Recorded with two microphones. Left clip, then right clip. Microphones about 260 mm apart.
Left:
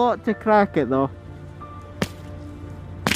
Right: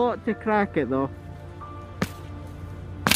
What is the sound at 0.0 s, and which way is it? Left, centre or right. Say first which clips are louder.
Speech: left 4 dB; centre.